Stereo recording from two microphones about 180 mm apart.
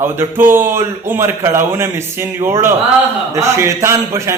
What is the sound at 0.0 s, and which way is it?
A man's voice, 10° right (ahead or behind).